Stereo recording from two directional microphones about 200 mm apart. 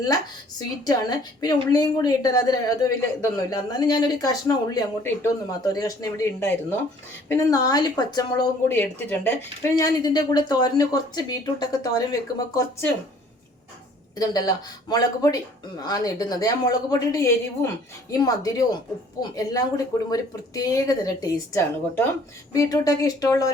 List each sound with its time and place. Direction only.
0.9 s a woman's voice: 20° left (ahead or behind)
14.2 s a woman's voice: 20° left (ahead or behind)